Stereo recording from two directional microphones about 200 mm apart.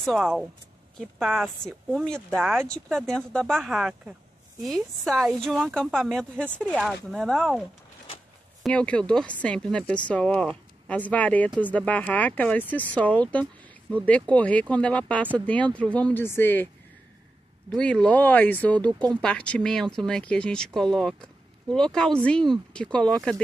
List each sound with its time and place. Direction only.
0.0 s speech: centre (ahead or behind)
8.6 s speech: 5° left (ahead or behind)
17.7 s speech: 5° left (ahead or behind)